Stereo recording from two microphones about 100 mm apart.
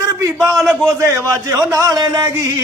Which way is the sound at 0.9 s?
30° right (ahead or behind).